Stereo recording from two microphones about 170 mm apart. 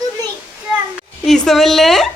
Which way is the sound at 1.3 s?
Centre (ahead or behind).